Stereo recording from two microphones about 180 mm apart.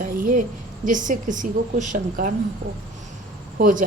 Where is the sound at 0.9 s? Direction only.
45° right (ahead or behind).